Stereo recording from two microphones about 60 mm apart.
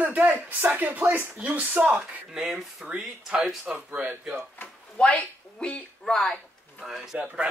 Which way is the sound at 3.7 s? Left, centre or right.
Right.